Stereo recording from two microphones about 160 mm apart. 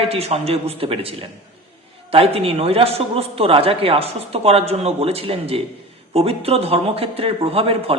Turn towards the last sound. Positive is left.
turn(degrees=-35)  # may be behind; listen again after turning